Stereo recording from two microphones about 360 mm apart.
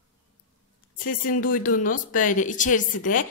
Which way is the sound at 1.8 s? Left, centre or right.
Left.